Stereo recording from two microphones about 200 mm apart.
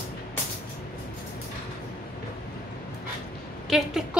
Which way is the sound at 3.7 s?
Centre (ahead or behind).